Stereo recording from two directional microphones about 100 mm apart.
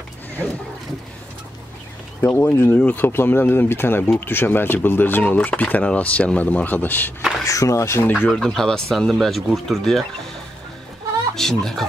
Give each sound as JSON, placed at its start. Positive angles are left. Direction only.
{"t": 2.2, "sound": "speech", "side_deg": 25}
{"t": 7.2, "sound": "speech", "side_deg": 0}
{"t": 7.4, "sound": "speech", "side_deg": 35}
{"t": 8.1, "sound": "speech", "side_deg": 10}
{"t": 11.3, "sound": "speech", "side_deg": 5}